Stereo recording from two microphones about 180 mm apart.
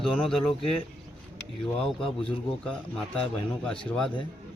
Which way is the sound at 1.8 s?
5° left (ahead or behind).